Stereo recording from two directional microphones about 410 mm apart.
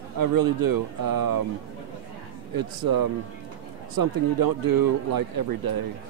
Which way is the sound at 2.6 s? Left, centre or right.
Right.